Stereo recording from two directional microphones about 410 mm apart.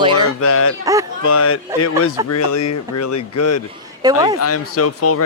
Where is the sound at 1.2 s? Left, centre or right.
Left.